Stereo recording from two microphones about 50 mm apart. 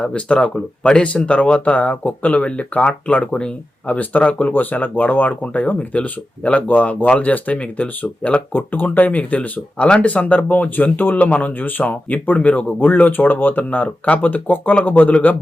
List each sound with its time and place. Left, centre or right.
0.0 s speech: left
8.5 s speech: left